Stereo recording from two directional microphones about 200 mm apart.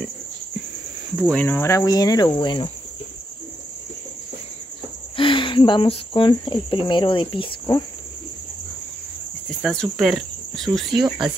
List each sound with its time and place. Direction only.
1.3 s cricket: 10° left (ahead or behind)
5.1 s cricket: 25° left (ahead or behind)
9.6 s cricket: centre (ahead or behind)
10.9 s speech: 20° right (ahead or behind)